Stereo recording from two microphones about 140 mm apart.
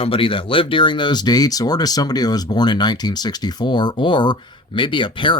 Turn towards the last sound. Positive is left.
turn(degrees=35)  # may be behind; listen again after turning